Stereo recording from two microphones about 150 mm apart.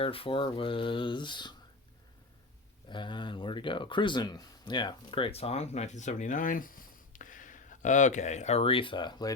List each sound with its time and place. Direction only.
0.0 s speech: 40° left (ahead or behind)
2.9 s speech: 30° left (ahead or behind)